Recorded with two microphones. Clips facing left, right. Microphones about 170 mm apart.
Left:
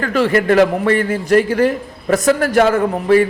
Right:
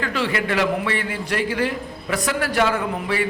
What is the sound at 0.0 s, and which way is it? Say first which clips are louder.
A man's voice: left 8 dB; 45° left (ahead or behind).